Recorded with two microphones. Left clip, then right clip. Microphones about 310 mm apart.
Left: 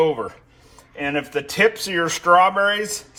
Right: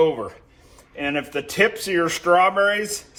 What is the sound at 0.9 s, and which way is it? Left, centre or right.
Speech, left.